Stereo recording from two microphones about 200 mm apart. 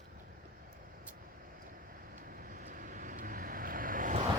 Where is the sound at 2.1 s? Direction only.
45° right (ahead or behind).